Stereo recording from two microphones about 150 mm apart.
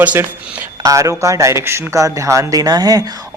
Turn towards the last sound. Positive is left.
turn(degrees=-25)  # may be behind; listen again after turning